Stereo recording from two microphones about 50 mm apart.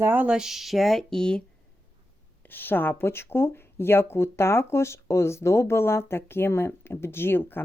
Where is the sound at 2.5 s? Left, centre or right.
Left.